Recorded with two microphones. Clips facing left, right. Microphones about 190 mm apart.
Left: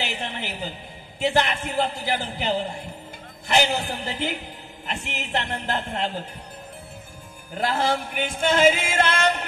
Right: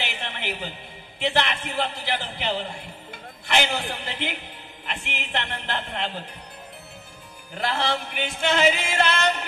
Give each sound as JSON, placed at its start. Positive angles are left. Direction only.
{"t": 0.0, "sound": "a sound", "side_deg": 40}
{"t": 1.2, "sound": "a man's voice", "side_deg": 40}
{"t": 7.6, "sound": "music", "side_deg": 45}